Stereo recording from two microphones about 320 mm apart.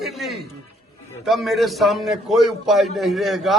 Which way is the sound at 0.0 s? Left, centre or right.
Centre.